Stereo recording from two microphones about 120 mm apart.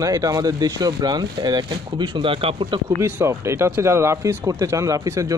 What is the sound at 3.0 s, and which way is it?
Speech, 20° right (ahead or behind).